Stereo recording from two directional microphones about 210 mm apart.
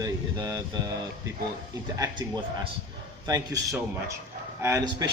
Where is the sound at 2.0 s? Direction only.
20° right (ahead or behind).